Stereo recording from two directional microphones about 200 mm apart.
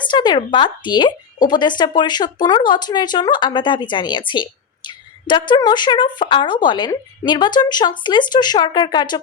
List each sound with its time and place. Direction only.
0.0 s speech: 20° left (ahead or behind)